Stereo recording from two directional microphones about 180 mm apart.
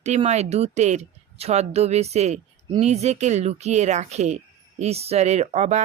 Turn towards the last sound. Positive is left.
turn(degrees=-40)  # may be behind; listen again after turning